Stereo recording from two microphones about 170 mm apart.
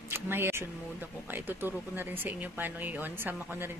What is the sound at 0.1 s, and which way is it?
Speech, 15° right (ahead or behind).